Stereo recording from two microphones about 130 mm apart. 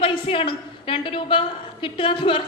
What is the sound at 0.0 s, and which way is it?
A woman's voice, 45° left (ahead or behind).